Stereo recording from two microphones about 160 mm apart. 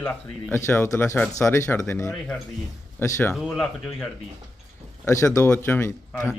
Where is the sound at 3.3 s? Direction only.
Centre (ahead or behind).